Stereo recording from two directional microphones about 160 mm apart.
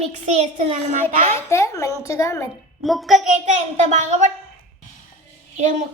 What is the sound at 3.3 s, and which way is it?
Speech, 50° right (ahead or behind).